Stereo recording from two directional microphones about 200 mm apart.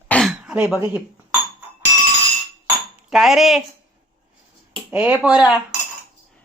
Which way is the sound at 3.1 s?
Centre (ahead or behind).